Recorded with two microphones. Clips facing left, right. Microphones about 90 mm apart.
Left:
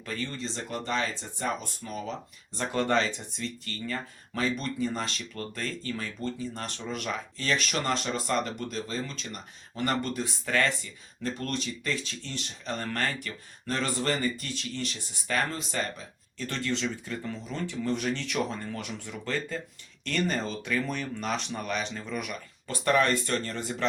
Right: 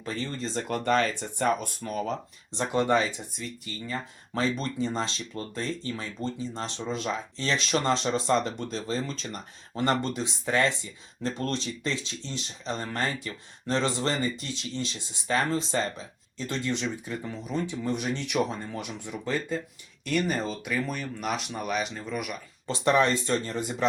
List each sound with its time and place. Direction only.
0.0 s speech: 25° right (ahead or behind)
0.3 s speech: 45° right (ahead or behind)
2.6 s speech: 20° right (ahead or behind)
4.4 s speech: 30° right (ahead or behind); by 22.4 s 5° right (ahead or behind)
22.6 s speech: 20° right (ahead or behind)